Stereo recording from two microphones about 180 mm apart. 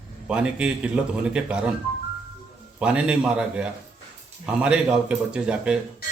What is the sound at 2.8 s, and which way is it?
A man's voice, 5° right (ahead or behind).